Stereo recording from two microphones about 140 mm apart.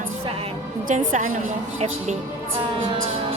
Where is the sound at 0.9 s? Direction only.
65° right (ahead or behind).